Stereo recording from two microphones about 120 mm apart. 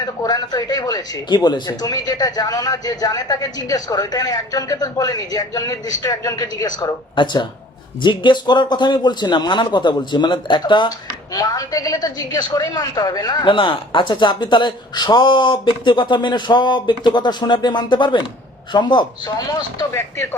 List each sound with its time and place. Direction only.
0.2 s a woman's voice: 35° left (ahead or behind)